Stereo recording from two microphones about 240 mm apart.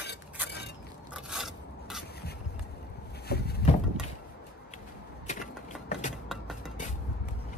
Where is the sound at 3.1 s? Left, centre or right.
Left.